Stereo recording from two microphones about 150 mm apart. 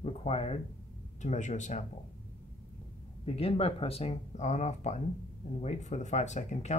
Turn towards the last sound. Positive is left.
turn(degrees=50)  # may be behind; listen again after turning